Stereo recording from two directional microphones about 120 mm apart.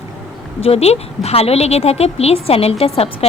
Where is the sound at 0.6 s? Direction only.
60° left (ahead or behind).